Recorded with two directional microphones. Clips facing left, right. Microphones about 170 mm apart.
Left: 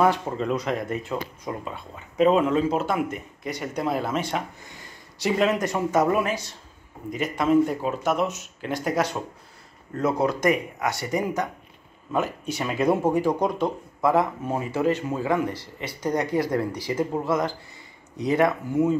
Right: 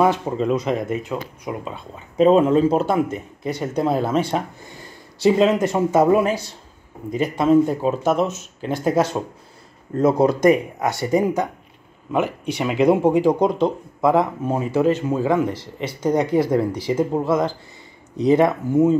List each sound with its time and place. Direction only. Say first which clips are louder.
0.0 s speech: right 3 dB; 15° right (ahead or behind)
2.1 s speech: right 5 dB; 30° right (ahead or behind)
12.1 s speech: right 4 dB; 15° right (ahead or behind)